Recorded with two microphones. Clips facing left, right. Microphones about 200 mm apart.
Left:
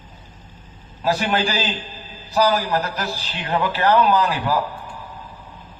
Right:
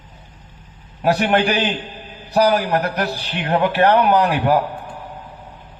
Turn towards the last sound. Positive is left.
turn(degrees=-60)  # may be behind; listen again after turning